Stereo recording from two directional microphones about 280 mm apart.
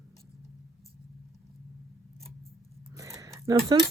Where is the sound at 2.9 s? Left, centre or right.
Centre.